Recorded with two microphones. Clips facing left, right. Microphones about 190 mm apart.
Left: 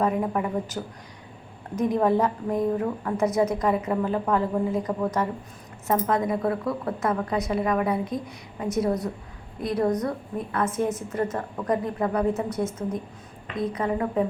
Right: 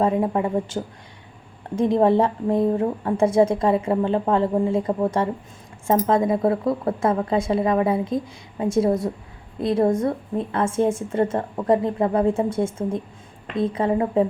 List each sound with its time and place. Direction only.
0.0 s a woman's voice: 30° right (ahead or behind)